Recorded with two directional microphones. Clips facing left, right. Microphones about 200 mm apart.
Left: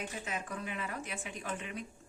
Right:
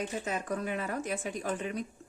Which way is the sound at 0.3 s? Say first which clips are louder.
Right 7 dB; 40° right (ahead or behind).